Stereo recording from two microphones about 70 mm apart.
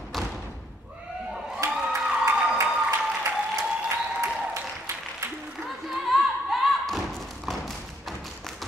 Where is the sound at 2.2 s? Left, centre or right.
Right.